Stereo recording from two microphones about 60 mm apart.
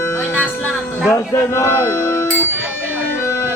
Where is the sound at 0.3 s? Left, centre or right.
Left.